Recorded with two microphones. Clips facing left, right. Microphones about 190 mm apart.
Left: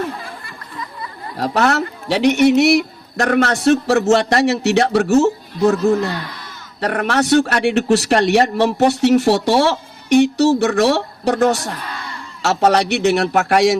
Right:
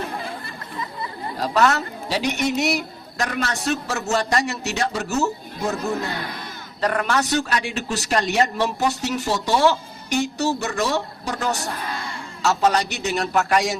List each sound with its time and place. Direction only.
1.4 s speech: 65° left (ahead or behind)
5.0 s speech: 30° left (ahead or behind)
6.7 s speech: 65° left (ahead or behind)